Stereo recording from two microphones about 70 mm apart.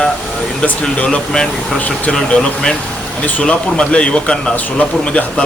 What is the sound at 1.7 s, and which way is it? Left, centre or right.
Speech, left.